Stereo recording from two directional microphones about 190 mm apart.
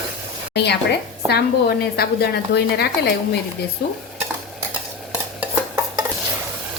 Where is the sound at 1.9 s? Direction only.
60° left (ahead or behind).